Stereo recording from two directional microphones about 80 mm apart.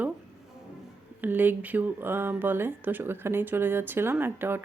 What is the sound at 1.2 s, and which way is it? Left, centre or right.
Speech, right.